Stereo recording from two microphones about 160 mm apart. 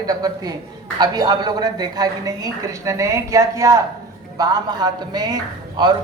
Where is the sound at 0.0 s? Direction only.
25° right (ahead or behind).